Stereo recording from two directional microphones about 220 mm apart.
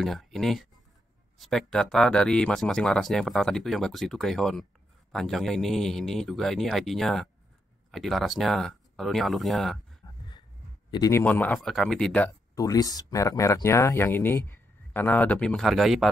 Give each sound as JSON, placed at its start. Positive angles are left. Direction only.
{"t": 0.0, "sound": "speech", "side_deg": 0}
{"t": 10.0, "sound": "a sound", "side_deg": 15}
{"t": 10.9, "sound": "speech", "side_deg": 15}